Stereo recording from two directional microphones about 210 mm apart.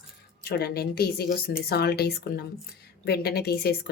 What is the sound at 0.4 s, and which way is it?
Speech, 50° left (ahead or behind).